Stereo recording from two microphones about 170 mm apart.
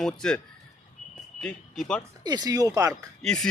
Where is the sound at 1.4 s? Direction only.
5° left (ahead or behind).